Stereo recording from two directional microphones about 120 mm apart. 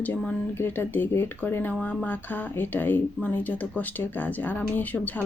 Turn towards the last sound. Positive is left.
turn(degrees=15)  # may be behind; listen again after turning